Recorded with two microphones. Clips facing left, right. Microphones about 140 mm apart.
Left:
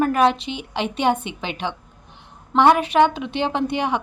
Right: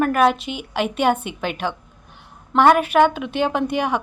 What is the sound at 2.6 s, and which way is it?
Speech, 20° left (ahead or behind).